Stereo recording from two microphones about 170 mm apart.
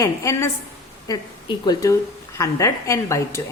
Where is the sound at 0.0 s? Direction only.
20° left (ahead or behind).